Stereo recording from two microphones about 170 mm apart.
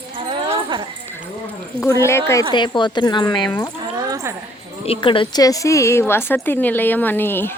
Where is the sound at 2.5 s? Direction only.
25° left (ahead or behind).